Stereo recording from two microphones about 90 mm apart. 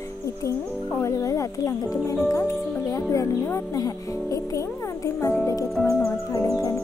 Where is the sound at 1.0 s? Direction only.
35° left (ahead or behind).